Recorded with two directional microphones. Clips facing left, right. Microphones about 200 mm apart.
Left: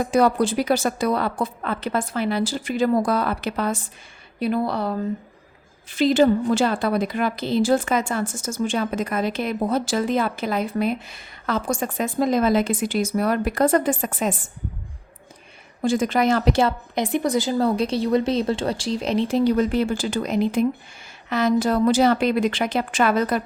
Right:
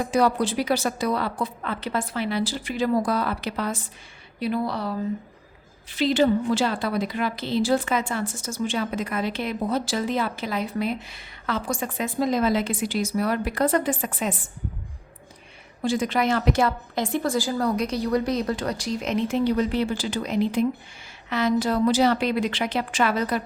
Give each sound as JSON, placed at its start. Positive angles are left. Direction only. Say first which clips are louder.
{"t": 0.1, "sound": "a woman's voice", "louder": "left 3 dB", "side_deg": 50}
{"t": 15.8, "sound": "a woman's voice", "louder": "left 3 dB", "side_deg": 45}